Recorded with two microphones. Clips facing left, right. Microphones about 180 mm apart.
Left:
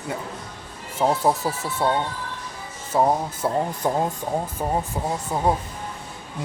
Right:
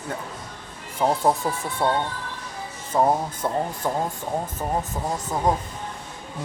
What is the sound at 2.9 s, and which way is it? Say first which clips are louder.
Speech: even; 5° left (ahead or behind).